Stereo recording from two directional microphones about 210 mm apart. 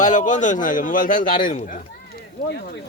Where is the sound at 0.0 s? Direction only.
35° left (ahead or behind).